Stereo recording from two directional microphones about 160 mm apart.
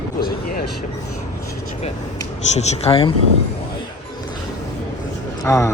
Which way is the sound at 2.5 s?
45° left (ahead or behind).